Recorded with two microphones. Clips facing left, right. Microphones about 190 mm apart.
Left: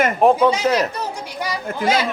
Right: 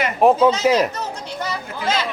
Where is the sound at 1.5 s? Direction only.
10° left (ahead or behind).